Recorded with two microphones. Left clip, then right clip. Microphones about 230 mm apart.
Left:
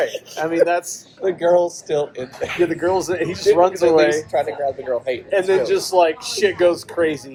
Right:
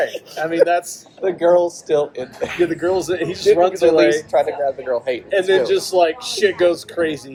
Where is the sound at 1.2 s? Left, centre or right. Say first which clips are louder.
Right 1 dB; right.